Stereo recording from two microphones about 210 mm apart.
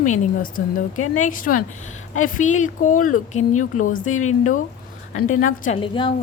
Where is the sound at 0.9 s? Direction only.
90° left.